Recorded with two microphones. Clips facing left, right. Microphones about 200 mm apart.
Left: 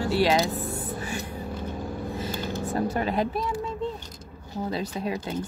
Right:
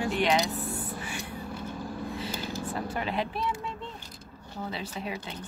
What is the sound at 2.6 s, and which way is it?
Speech, 40° left (ahead or behind).